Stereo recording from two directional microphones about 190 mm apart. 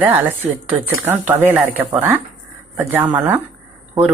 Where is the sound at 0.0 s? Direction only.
10° right (ahead or behind).